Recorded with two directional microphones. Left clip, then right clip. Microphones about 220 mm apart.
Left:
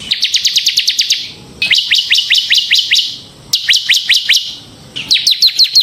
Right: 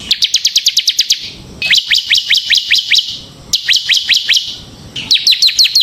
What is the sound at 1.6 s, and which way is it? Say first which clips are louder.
Bird: even; 25° right (ahead or behind).